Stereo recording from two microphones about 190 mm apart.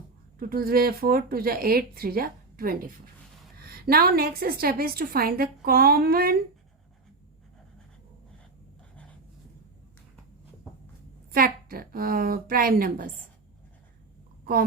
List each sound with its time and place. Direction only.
0.3 s a woman's voice: 50° right (ahead or behind)
11.3 s a woman's voice: 50° right (ahead or behind)